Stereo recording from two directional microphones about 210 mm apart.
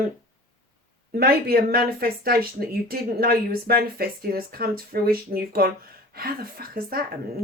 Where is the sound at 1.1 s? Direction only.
45° right (ahead or behind).